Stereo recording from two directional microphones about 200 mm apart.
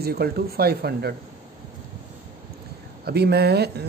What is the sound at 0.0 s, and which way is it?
Speech, 50° right (ahead or behind).